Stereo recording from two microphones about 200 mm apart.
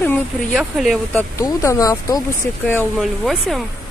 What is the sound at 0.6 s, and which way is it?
Speech, centre (ahead or behind).